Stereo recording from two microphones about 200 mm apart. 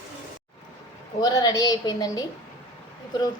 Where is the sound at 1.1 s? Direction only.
20° left (ahead or behind).